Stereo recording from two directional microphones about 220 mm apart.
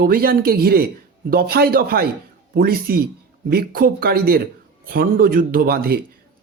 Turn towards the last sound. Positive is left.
turn(degrees=-45)  # may be behind; listen again after turning